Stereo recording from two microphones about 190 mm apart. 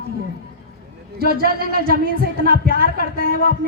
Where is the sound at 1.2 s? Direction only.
55° right (ahead or behind).